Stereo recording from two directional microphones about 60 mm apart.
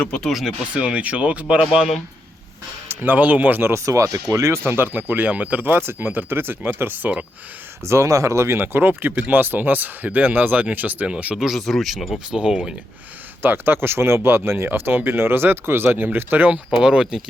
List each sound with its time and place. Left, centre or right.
0.3 s speech: centre
0.7 s speech: centre
2.9 s speech: right
3.8 s speech: right
4.6 s speech: right
5.8 s speech: right
7.9 s speech: right
8.6 s speech: right
11.3 s speech: centre
13.4 s speech: right
16.8 s speech: centre